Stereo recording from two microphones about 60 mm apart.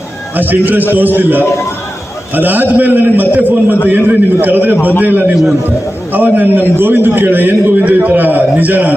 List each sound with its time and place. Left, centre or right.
0.3 s a man's voice: right
5.3 s a man's voice: centre
6.1 s a man's voice: right